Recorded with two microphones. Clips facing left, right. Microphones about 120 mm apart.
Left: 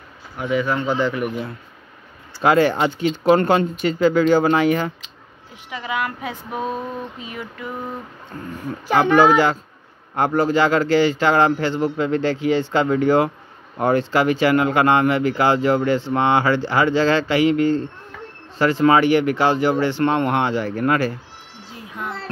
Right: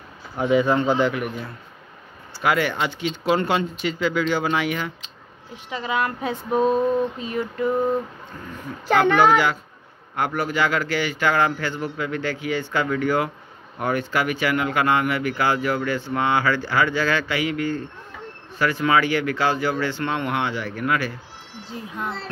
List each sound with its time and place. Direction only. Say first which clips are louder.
0.4 s speech: right 3 dB; 25° right (ahead or behind)
2.4 s speech: left 6 dB; 35° left (ahead or behind)
5.8 s speech: right 1 dB; 25° right (ahead or behind)
7.2 s mantra: right 6 dB; 15° left (ahead or behind)
8.8 s mantra: even; 15° left (ahead or behind)
9.1 s speech: left 3 dB; 40° left (ahead or behind)